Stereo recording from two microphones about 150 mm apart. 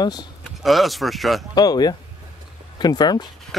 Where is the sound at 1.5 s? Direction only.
25° left (ahead or behind).